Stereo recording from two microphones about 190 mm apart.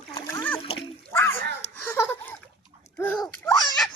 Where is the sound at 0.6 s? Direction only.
30° left (ahead or behind).